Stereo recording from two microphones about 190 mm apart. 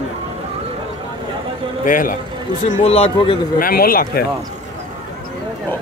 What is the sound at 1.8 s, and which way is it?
Speech, 45° left (ahead or behind).